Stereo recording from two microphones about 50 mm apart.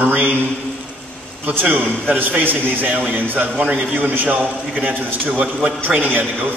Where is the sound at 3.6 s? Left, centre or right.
Right.